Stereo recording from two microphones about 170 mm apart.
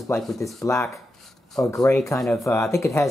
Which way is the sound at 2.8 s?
20° left (ahead or behind).